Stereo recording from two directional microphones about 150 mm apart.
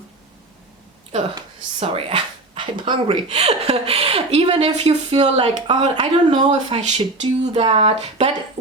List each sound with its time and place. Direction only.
1.8 s speech: 40° right (ahead or behind)